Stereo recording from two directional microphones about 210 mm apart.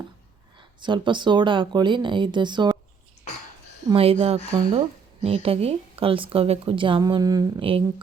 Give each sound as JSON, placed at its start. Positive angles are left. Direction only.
{"t": 0.8, "sound": "a woman's voice", "side_deg": -20}
{"t": 3.8, "sound": "a woman's voice", "side_deg": -25}